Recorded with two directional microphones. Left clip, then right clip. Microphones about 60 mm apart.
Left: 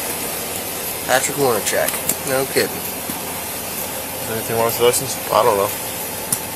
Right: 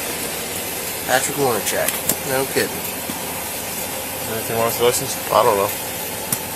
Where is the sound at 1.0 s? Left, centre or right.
Left.